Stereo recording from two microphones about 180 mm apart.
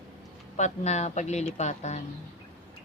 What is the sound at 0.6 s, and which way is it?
Speech, 40° left (ahead or behind).